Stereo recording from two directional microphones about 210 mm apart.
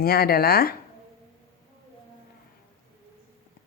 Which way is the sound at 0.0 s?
45° left (ahead or behind).